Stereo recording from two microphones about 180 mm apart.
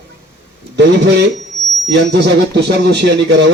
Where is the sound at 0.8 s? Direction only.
75° right (ahead or behind).